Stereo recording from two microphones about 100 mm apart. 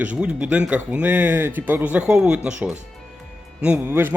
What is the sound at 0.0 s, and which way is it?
Speech, 15° right (ahead or behind).